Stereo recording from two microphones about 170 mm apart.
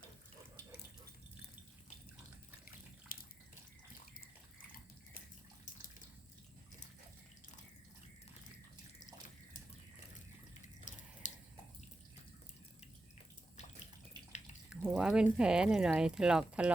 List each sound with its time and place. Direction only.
3.1 s bathtub: 55° left (ahead or behind)
10.9 s drip: 50° left (ahead or behind)
11.2 s water: 45° left (ahead or behind)
14.8 s speech: 5° right (ahead or behind)